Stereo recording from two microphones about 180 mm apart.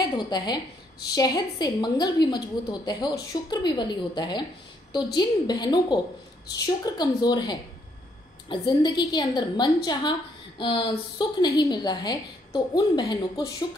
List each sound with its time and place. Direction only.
0.0 s a woman's voice: 25° left (ahead or behind)